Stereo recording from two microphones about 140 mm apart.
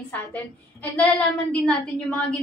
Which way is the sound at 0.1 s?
10° left (ahead or behind).